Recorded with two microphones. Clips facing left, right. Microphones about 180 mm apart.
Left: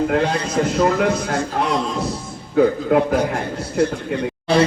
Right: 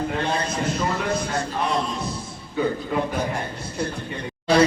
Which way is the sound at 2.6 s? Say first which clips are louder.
Left 8 dB; 75° left (ahead or behind).